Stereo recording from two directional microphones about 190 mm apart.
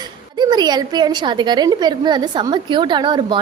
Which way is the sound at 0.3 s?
20° right (ahead or behind).